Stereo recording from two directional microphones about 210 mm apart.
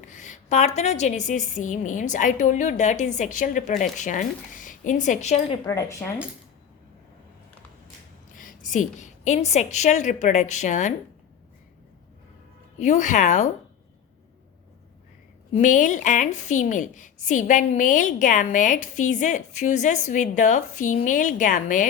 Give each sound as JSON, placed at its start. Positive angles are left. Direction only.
{"t": 0.1, "sound": "a woman's voice", "side_deg": 35}
{"t": 5.6, "sound": "speech", "side_deg": 15}
{"t": 8.4, "sound": "a woman's voice", "side_deg": 40}
{"t": 12.8, "sound": "a woman's voice", "side_deg": 35}
{"t": 15.5, "sound": "a woman's voice", "side_deg": 40}